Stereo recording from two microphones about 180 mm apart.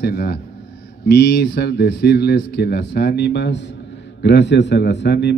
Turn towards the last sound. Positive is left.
turn(degrees=70)  # may be behind; listen again after turning